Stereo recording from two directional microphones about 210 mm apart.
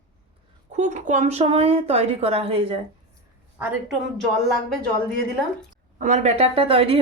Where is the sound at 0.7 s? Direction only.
35° right (ahead or behind).